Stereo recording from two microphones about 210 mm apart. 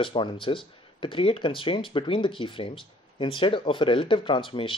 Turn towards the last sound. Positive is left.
turn(degrees=25)  # may be behind; listen again after turning